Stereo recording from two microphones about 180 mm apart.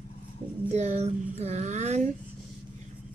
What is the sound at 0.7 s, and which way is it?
Child singing, 40° right (ahead or behind).